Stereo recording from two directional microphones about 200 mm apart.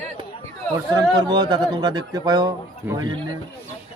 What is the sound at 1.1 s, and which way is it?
Speech, 20° right (ahead or behind).